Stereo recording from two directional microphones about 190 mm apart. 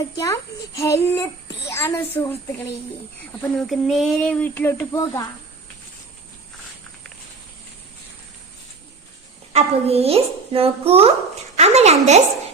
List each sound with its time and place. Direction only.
0.2 s a child's voice: 15° left (ahead or behind)
3.6 s a child's voice: centre (ahead or behind); by 5.3 s 15° left (ahead or behind)
9.5 s a woman's voice: 35° right (ahead or behind)